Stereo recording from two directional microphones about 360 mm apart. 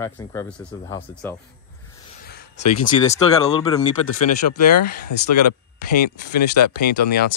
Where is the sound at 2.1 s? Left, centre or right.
Left.